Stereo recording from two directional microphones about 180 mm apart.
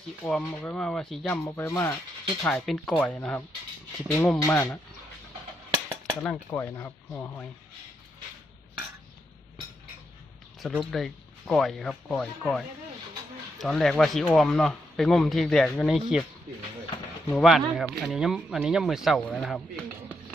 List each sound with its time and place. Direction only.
0.2 s speech: 5° left (ahead or behind)
1.5 s speech: 15° left (ahead or behind)
2.4 s speech: 5° left (ahead or behind)
6.2 s speech: 10° left (ahead or behind)
10.6 s speech: centre (ahead or behind)
17.3 s speech: centre (ahead or behind)